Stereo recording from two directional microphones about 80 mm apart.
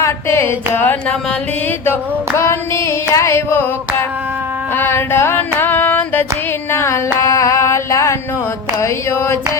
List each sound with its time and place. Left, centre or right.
0.0 s carnatic music: left
2.4 s singing: left
4.8 s a sound: left
8.8 s singing: left